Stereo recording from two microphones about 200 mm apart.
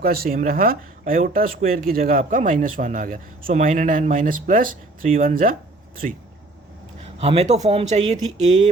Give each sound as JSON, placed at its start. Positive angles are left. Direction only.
{"t": 0.0, "sound": "speech", "side_deg": -50}
{"t": 7.0, "sound": "speech", "side_deg": -30}